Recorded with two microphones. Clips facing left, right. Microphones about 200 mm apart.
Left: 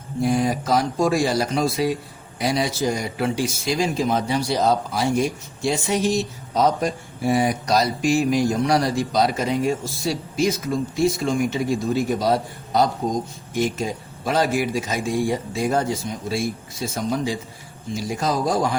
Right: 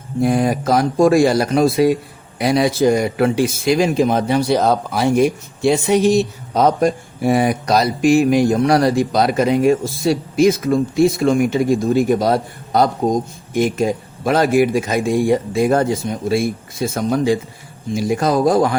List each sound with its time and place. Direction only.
0.2 s speech: 55° right (ahead or behind)